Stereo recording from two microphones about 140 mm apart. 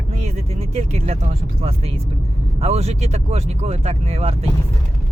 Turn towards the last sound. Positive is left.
turn(degrees=-45)  # may be behind; listen again after turning